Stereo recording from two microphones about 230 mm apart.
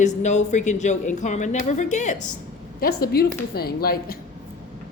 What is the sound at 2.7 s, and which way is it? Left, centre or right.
Speech, left.